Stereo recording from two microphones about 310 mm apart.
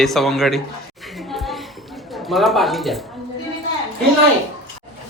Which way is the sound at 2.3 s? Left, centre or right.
Centre.